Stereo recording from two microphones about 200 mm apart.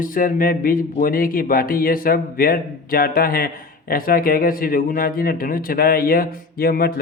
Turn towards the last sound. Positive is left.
turn(degrees=50)  # may be behind; listen again after turning